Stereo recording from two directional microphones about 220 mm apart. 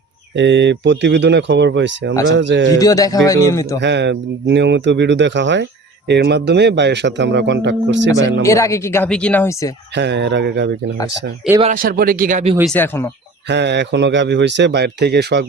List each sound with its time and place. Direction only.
0.3 s a man's voice: 55° right (ahead or behind)
2.7 s speech: 15° left (ahead or behind)
3.8 s a man's voice: 50° right (ahead or behind)
8.2 s speech: 15° left (ahead or behind)
9.9 s a man's voice: 50° right (ahead or behind)
11.6 s speech: 40° right (ahead or behind)
12.7 s speech: 10° left (ahead or behind)
13.5 s a man's voice: 50° right (ahead or behind)